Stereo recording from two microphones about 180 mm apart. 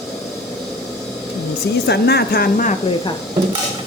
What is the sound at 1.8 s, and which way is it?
Speech, 65° left (ahead or behind).